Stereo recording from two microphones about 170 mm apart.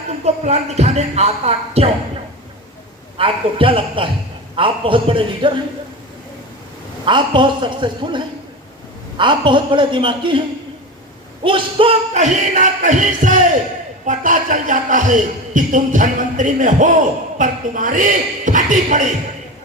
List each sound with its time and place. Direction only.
0.3 s speech: 40° right (ahead or behind)
3.2 s speech: 30° right (ahead or behind)
7.0 s a woman's voice: 30° right (ahead or behind)
11.4 s speech: 30° right (ahead or behind)
12.1 s speech: 45° right (ahead or behind)